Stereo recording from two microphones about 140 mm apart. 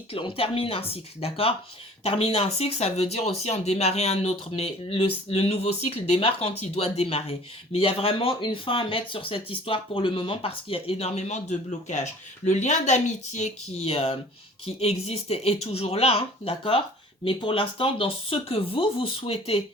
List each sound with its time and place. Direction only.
0.1 s speech: 40° left (ahead or behind)